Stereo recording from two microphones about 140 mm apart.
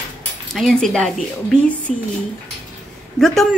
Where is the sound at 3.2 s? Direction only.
5° left (ahead or behind).